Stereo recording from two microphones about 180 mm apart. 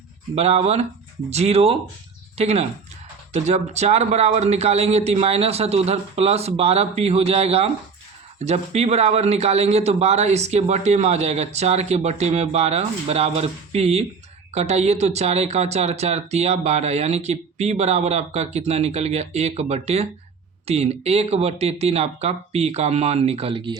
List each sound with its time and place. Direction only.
0.3 s a man's voice: 35° right (ahead or behind)